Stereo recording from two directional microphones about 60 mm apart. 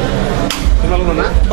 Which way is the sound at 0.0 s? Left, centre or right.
Right.